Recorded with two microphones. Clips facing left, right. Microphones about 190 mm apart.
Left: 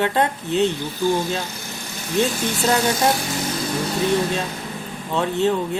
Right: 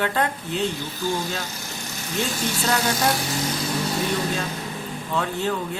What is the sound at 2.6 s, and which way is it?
Speech, 25° left (ahead or behind).